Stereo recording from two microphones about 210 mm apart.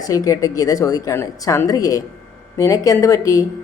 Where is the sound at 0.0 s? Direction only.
15° left (ahead or behind).